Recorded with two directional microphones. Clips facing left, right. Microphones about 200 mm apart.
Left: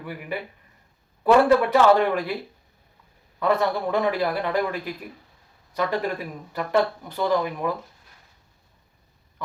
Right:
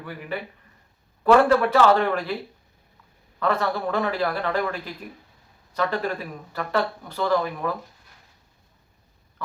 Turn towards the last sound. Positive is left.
turn(degrees=15)  # may be behind; listen again after turning